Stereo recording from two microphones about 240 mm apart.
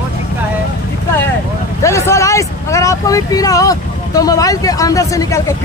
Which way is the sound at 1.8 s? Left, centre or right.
Centre.